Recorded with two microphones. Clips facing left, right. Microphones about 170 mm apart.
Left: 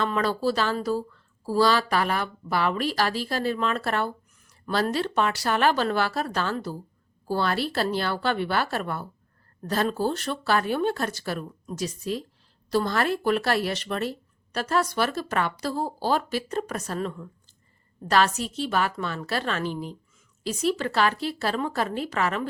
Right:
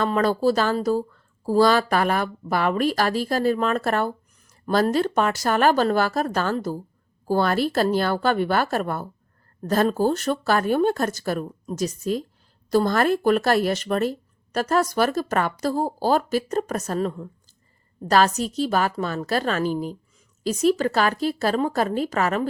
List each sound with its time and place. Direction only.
0.0 s a woman's voice: 45° right (ahead or behind)